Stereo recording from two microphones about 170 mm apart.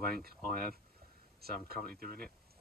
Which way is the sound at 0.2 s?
60° right (ahead or behind).